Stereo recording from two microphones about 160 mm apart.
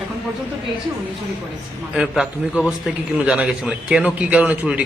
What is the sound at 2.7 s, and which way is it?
Speech, 5° right (ahead or behind).